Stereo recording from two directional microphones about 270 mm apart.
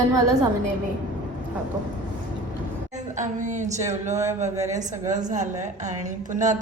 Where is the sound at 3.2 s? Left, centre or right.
Right.